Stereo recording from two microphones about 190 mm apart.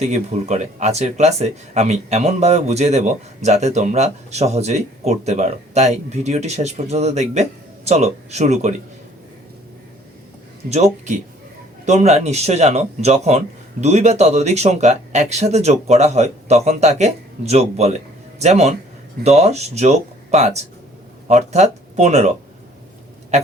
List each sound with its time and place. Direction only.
0.0 s speech: 35° right (ahead or behind)
10.7 s speech: 35° right (ahead or behind)